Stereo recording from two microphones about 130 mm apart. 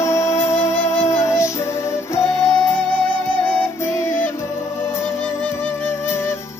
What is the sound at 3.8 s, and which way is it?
Music, 20° left (ahead or behind).